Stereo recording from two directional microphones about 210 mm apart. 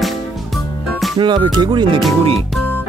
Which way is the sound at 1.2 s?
20° right (ahead or behind).